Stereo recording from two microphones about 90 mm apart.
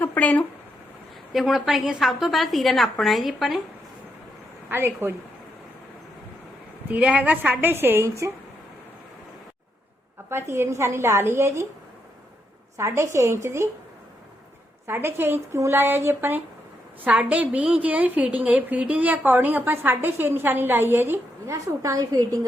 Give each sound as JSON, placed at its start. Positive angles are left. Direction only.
{"t": 0.0, "sound": "a sound", "side_deg": 20}
{"t": 1.3, "sound": "a woman's voice", "side_deg": 0}
{"t": 4.7, "sound": "a woman's voice", "side_deg": -25}
{"t": 6.9, "sound": "a woman's voice", "side_deg": -15}
{"t": 10.2, "sound": "a woman's voice", "side_deg": -30}
{"t": 12.7, "sound": "a woman's voice", "side_deg": -30}
{"t": 14.8, "sound": "a woman's voice", "side_deg": -25}